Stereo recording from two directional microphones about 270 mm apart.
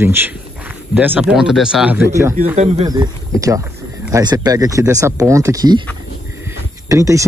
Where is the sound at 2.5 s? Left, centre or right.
Right.